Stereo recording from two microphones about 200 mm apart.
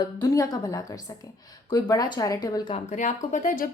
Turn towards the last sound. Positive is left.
turn(degrees=45)  # may be behind; listen again after turning